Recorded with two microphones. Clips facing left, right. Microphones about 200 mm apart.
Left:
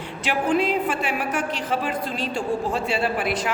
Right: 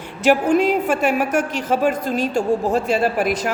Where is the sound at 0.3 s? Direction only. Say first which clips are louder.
Right 6 dB; 45° right (ahead or behind).